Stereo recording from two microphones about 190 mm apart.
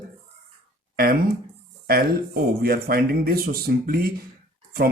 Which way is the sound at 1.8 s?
50° right (ahead or behind).